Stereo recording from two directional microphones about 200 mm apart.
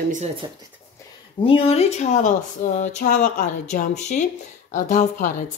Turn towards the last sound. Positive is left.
turn(degrees=40)  # may be behind; listen again after turning